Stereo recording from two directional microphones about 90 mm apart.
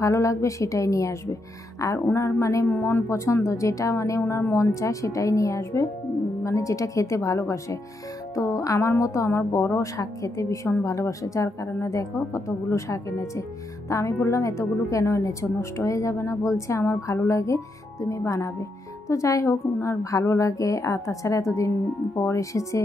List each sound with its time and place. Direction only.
0.0 s a woman's voice: 35° left (ahead or behind)